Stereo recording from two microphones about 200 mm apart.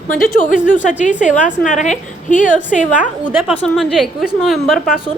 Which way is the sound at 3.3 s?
10° right (ahead or behind).